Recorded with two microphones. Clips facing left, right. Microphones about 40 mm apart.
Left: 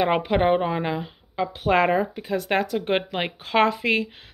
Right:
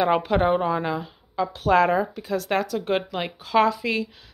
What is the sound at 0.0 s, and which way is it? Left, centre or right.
Speech, left.